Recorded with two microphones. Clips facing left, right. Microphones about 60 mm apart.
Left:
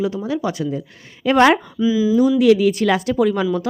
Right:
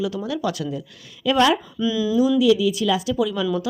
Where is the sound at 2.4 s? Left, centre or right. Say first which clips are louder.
Left 4 dB; left.